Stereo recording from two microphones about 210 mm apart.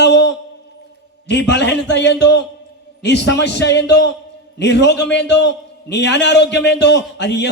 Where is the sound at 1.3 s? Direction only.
55° left (ahead or behind).